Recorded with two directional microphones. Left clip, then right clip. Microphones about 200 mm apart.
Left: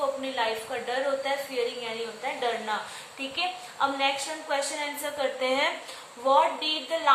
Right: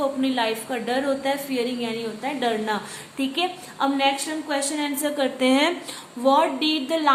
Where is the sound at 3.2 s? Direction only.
50° right (ahead or behind).